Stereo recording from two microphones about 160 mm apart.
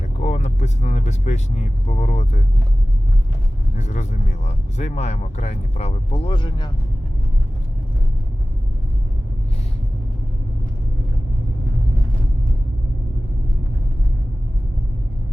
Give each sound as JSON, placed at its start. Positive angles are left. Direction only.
{"t": 0.2, "sound": "vehicle", "side_deg": 45}
{"t": 1.9, "sound": "speech", "side_deg": 45}
{"t": 3.8, "sound": "speech", "side_deg": 45}